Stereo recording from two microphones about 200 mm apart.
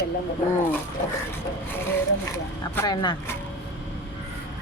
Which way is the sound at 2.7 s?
20° left (ahead or behind).